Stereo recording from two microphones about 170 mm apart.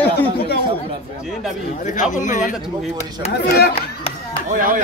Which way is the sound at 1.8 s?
50° left (ahead or behind).